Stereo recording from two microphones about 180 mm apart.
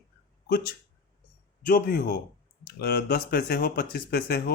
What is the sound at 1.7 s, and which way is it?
A man's voice, 50° left (ahead or behind).